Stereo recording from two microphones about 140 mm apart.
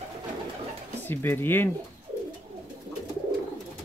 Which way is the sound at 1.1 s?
15° left (ahead or behind).